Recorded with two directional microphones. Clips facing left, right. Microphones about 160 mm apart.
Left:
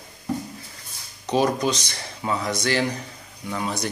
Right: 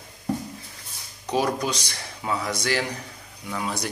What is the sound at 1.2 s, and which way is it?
Speech, 10° right (ahead or behind).